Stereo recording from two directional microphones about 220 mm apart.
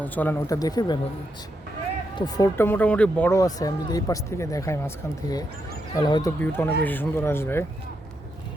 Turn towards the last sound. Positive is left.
turn(degrees=10)  # may be behind; listen again after turning